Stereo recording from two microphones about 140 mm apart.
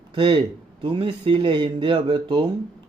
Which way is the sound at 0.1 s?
40° right (ahead or behind).